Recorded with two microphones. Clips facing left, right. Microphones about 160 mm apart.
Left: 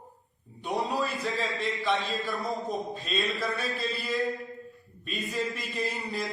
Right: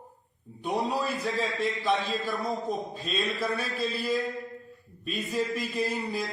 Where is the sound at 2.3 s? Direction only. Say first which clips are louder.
Right 1 dB; centre (ahead or behind).